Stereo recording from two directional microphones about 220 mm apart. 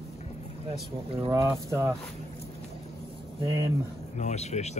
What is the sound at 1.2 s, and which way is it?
Speech, 15° right (ahead or behind).